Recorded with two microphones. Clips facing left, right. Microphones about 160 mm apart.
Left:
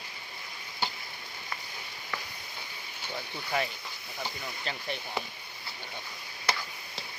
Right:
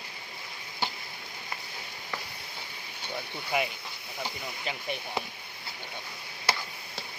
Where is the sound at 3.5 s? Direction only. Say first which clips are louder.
Right 2 dB; 10° right (ahead or behind).